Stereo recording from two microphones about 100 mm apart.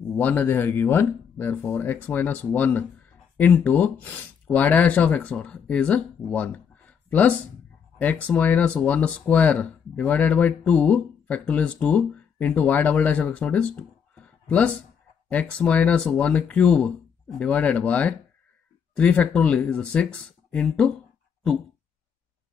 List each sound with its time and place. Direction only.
0.1 s speech: 15° left (ahead or behind)